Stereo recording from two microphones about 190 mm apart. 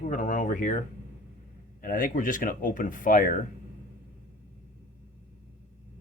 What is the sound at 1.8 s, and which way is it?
Speech, 45° left (ahead or behind).